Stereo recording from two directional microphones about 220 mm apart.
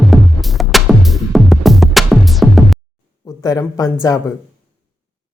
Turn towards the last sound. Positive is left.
turn(degrees=15)  # may be behind; listen again after turning